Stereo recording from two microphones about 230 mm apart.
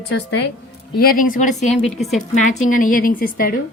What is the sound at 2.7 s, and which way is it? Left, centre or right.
Speech, left.